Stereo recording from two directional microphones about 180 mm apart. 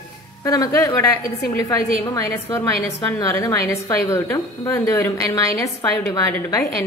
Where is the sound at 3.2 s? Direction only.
15° left (ahead or behind).